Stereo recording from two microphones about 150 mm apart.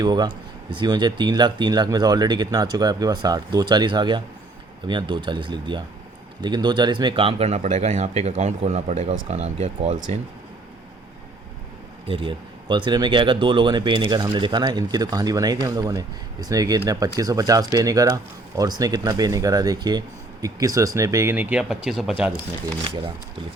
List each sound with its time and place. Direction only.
0.0 s speech: 30° right (ahead or behind); by 10.0 s 45° right (ahead or behind)
12.0 s speech: 35° right (ahead or behind); by 22.1 s centre (ahead or behind)